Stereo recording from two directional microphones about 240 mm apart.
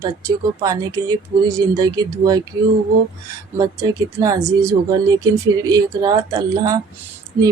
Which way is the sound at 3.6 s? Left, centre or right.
Centre.